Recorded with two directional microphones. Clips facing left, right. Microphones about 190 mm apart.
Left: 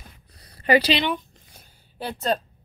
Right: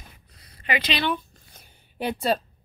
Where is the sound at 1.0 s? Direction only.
15° left (ahead or behind).